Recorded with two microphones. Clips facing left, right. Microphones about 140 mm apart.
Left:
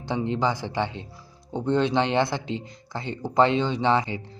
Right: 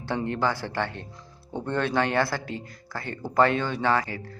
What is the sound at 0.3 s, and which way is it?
Speech, 15° left (ahead or behind).